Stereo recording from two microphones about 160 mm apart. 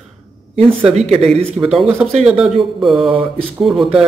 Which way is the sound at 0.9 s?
45° right (ahead or behind).